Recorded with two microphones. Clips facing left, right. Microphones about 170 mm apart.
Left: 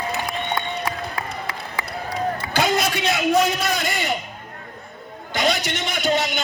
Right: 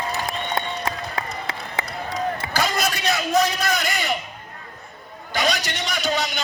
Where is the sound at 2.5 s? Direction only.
20° left (ahead or behind).